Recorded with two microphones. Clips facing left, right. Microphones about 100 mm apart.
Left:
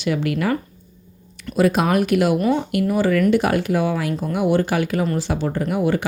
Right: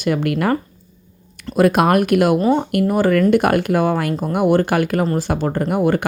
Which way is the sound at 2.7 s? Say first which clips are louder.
Right 3 dB; 50° right (ahead or behind).